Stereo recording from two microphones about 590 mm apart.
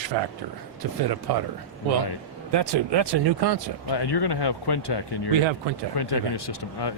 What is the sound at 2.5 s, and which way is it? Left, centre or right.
Speech, right.